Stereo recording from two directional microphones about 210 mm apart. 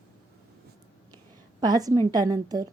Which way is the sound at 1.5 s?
20° right (ahead or behind).